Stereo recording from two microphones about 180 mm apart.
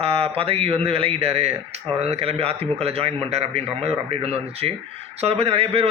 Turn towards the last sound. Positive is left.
turn(degrees=-35)  # may be behind; listen again after turning